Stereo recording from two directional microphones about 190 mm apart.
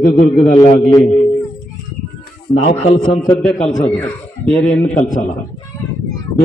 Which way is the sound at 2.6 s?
50° left (ahead or behind).